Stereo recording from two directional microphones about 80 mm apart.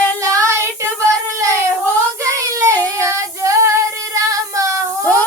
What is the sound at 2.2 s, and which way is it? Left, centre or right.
Child singing, right.